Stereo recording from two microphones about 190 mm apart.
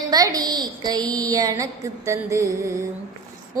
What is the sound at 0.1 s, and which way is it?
Speech, 20° right (ahead or behind).